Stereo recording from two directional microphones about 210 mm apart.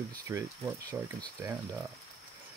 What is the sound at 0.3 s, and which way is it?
Speech, 15° right (ahead or behind).